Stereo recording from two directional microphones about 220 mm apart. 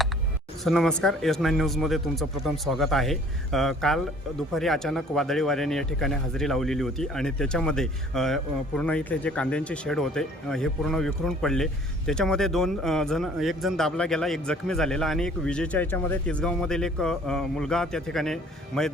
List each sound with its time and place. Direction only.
0.6 s speech: centre (ahead or behind)